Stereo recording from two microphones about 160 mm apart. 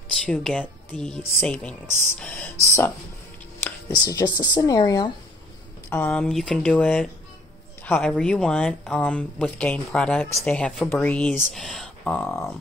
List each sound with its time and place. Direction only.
0.2 s speech: 5° left (ahead or behind); by 5.1 s 20° left (ahead or behind)
5.9 s speech: 10° left (ahead or behind)